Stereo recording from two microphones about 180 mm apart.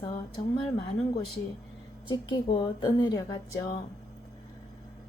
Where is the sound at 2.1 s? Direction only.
25° left (ahead or behind).